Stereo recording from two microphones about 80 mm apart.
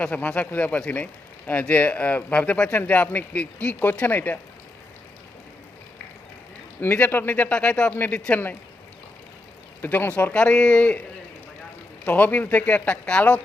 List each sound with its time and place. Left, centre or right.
0.0 s speech: centre
6.8 s speech: left
9.8 s speech: left
12.0 s speech: left